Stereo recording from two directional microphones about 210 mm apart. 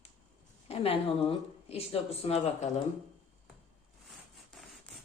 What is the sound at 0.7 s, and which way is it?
A woman's voice, 30° left (ahead or behind).